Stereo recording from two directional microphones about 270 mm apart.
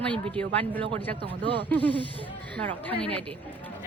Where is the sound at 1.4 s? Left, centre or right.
Centre.